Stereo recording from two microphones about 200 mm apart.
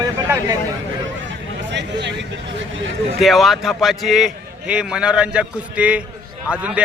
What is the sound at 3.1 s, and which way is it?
A man's voice, centre (ahead or behind).